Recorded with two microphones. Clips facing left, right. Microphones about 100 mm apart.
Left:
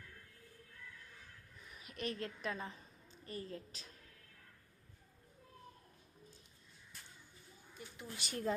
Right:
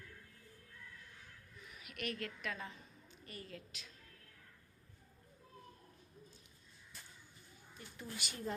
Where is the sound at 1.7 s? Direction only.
30° left (ahead or behind).